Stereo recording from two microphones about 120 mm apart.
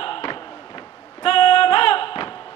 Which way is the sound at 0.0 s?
45° left (ahead or behind).